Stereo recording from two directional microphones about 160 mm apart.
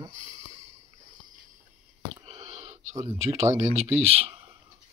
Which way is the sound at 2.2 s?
40° right (ahead or behind).